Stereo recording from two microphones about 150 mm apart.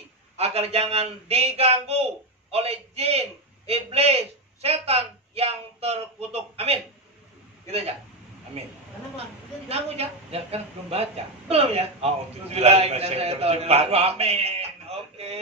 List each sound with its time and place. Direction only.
0.4 s a woman's voice: 45° right (ahead or behind)
8.6 s a woman's voice: 40° right (ahead or behind)